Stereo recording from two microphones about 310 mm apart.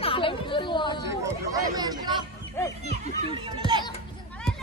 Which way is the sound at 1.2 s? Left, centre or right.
Centre.